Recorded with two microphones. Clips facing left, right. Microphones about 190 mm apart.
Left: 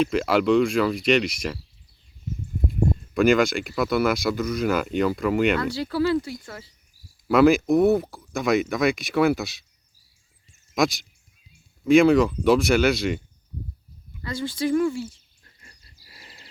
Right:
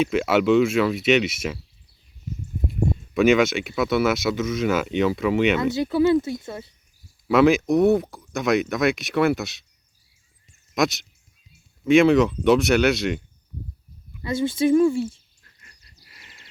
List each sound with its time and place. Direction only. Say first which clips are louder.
0.0 s speech: right 1 dB; centre (ahead or behind)
3.2 s speech: right 1 dB; centre (ahead or behind)
5.7 s speech: right 4 dB; 20° right (ahead or behind)
7.3 s speech: even; centre (ahead or behind)
10.8 s speech: even; centre (ahead or behind)
14.2 s speech: right 5 dB; 25° right (ahead or behind)
16.0 s a sound: left 4 dB; 35° left (ahead or behind)